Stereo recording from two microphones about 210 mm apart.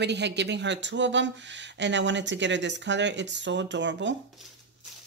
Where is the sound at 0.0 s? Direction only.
55° right (ahead or behind).